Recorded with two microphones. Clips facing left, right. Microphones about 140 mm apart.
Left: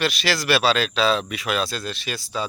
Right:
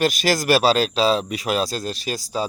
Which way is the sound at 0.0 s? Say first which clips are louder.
Right 4 dB; 45° right (ahead or behind).